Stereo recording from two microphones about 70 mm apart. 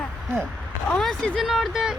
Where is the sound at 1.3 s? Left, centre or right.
Centre.